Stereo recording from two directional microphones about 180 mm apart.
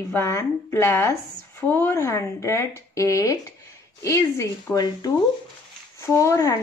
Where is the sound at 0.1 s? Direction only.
15° left (ahead or behind).